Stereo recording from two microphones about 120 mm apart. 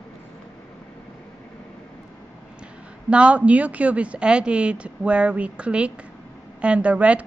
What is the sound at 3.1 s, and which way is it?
Speech, 10° right (ahead or behind).